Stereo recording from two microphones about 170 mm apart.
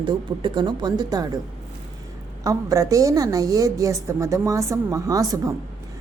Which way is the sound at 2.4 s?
20° right (ahead or behind).